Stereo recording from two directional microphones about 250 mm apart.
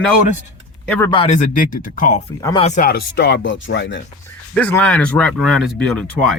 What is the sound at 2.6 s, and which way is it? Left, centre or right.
Speech, left.